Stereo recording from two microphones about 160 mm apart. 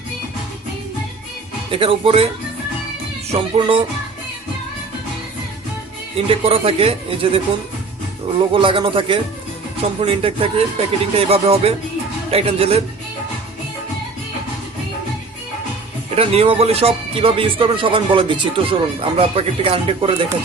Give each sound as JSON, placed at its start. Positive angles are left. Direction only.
{"t": 1.7, "sound": "speech", "side_deg": -35}
{"t": 3.3, "sound": "speech", "side_deg": -35}
{"t": 6.1, "sound": "speech", "side_deg": -35}
{"t": 8.5, "sound": "speech", "side_deg": -30}
{"t": 16.1, "sound": "speech", "side_deg": -40}